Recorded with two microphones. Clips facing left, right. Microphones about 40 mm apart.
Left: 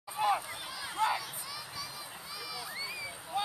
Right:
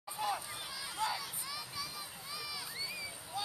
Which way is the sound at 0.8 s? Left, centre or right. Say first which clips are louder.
Left 6 dB; left.